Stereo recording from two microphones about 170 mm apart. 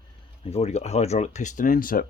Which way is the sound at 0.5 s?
40° left (ahead or behind).